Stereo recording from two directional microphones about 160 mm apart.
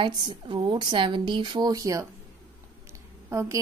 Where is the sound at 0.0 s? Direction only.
30° right (ahead or behind).